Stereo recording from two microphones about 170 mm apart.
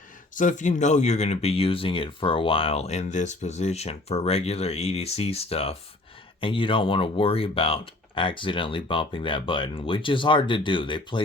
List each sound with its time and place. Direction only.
0.3 s speech: 50° left (ahead or behind); by 11.2 s 30° left (ahead or behind)